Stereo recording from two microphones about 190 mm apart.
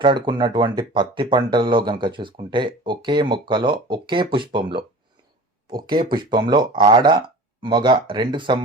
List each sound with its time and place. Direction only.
0.0 s speech: 25° right (ahead or behind)
6.0 s speech: 25° right (ahead or behind)